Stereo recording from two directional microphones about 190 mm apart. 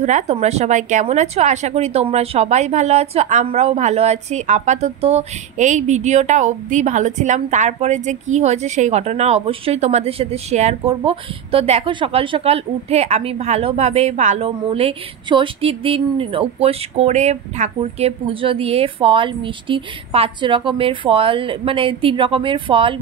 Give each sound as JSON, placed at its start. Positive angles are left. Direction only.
{"t": 0.0, "sound": "a woman's voice", "side_deg": -35}